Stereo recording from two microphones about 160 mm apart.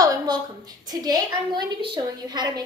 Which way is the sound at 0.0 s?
25° right (ahead or behind).